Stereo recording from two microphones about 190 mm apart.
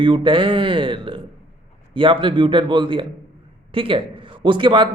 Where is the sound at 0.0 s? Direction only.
25° right (ahead or behind).